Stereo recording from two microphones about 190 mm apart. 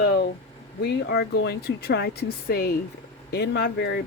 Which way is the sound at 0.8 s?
60° left (ahead or behind).